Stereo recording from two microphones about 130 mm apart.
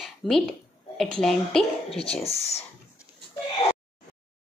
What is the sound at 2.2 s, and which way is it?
Speech, 55° left (ahead or behind).